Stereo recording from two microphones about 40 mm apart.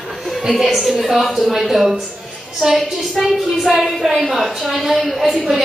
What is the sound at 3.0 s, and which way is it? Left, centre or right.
A woman's voice, centre.